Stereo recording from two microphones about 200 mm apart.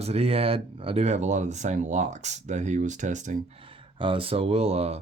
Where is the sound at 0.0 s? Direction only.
30° right (ahead or behind).